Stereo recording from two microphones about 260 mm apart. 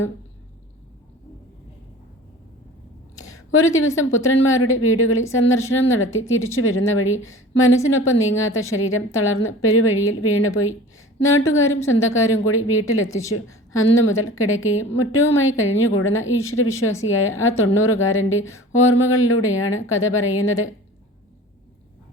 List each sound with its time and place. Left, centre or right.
3.3 s a woman's voice: left
14.2 s a woman's voice: left